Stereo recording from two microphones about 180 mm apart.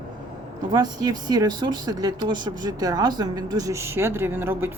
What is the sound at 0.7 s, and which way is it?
Speech, 20° right (ahead or behind).